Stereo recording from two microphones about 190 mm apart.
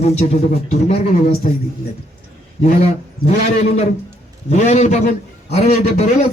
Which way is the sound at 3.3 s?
35° left (ahead or behind).